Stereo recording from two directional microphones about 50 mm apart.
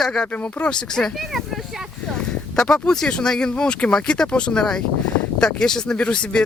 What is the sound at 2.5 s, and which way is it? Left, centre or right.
Speech, centre.